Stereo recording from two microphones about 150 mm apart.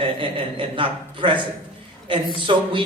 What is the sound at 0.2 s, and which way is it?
Speech, 35° right (ahead or behind).